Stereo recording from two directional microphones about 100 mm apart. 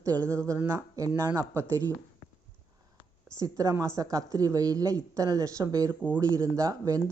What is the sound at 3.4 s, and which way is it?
A woman's voice, 30° right (ahead or behind).